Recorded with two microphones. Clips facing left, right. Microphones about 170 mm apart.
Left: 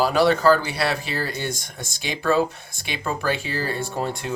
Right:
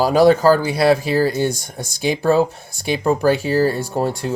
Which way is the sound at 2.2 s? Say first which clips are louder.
Right 3 dB; 40° right (ahead or behind).